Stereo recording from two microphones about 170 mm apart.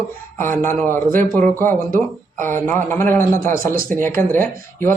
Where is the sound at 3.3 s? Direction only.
55° right (ahead or behind).